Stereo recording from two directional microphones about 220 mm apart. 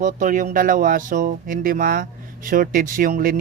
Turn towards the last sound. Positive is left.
turn(degrees=-40)  # may be behind; listen again after turning